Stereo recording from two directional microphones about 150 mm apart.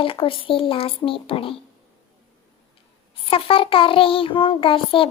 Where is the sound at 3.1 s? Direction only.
40° left (ahead or behind).